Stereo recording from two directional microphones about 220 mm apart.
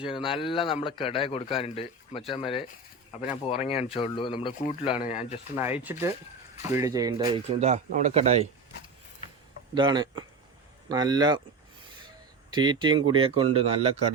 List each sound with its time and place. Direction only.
0.1 s a man's voice: 20° left (ahead or behind)
5.5 s speech: 10° right (ahead or behind); by 8.4 s 30° right (ahead or behind)
9.7 s speech: 20° right (ahead or behind)